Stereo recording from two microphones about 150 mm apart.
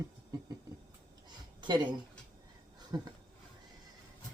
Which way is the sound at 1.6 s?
30° right (ahead or behind).